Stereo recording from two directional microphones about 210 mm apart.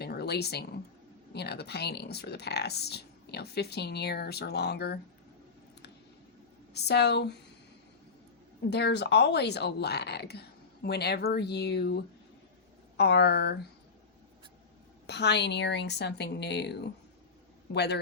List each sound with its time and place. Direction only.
0.0 s a sound: 50° left (ahead or behind)
1.3 s speech: 50° left (ahead or behind)
6.7 s speech: 50° left (ahead or behind)
8.7 s speech: 55° left (ahead or behind)
13.0 s speech: 50° left (ahead or behind)
15.0 s speech: 55° left (ahead or behind)